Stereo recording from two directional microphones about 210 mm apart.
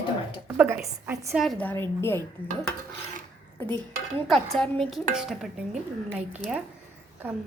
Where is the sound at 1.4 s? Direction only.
5° left (ahead or behind).